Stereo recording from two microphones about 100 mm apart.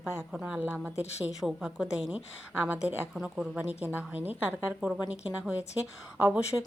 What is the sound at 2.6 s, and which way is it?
A woman's voice, 15° right (ahead or behind).